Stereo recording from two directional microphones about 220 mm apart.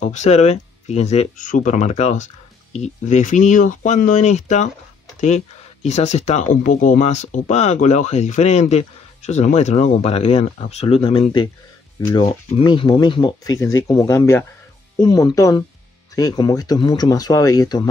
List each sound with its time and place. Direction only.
0.0 s speech: 30° left (ahead or behind)